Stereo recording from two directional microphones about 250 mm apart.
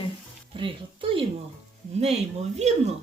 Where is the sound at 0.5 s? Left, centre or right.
Right.